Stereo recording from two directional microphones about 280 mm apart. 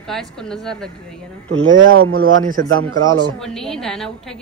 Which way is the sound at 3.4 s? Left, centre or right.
Centre.